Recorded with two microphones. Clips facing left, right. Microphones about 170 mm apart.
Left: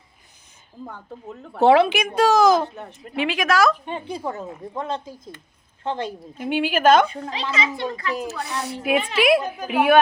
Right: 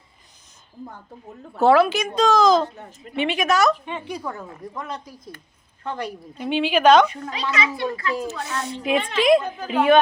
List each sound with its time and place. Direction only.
0.9 s speech: 70° left (ahead or behind)
1.6 s a woman's voice: 20° left (ahead or behind); by 3.8 s centre (ahead or behind)
3.8 s a woman's voice: 35° left (ahead or behind)
6.3 s a woman's voice: 10° left (ahead or behind)
7.1 s a woman's voice: 30° left (ahead or behind)
8.3 s a woman's voice: centre (ahead or behind)